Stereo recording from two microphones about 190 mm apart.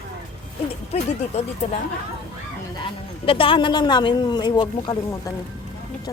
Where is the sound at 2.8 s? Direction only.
30° left (ahead or behind).